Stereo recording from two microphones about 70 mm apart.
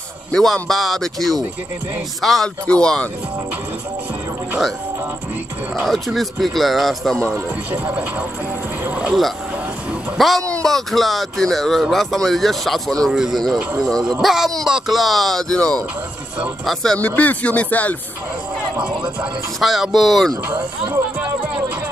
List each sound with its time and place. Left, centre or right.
0.3 s speech: centre
5.8 s speech: centre
7.2 s speech: right
7.7 s speech: right
10.1 s speech: centre
10.4 s speech: centre
10.7 s speech: centre
13.8 s speech: centre
14.2 s speech: centre
15.5 s speech: centre
17.0 s speech: left
19.6 s speech: centre